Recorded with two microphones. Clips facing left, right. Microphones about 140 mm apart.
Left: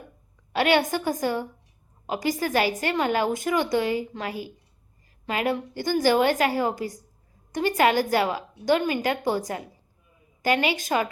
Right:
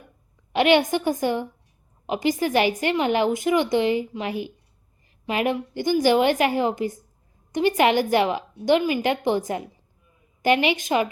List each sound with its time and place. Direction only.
0.5 s a woman's voice: 20° right (ahead or behind)